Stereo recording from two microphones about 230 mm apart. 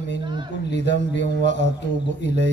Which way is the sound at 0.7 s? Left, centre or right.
Left.